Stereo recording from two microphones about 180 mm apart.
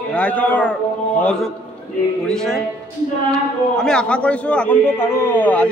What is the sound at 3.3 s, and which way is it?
A man's voice, 5° left (ahead or behind).